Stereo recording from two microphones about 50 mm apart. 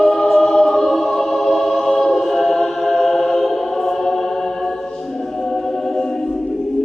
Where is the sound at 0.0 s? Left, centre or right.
Centre.